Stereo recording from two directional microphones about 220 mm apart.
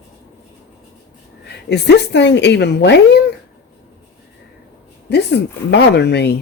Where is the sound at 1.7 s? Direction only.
50° left (ahead or behind).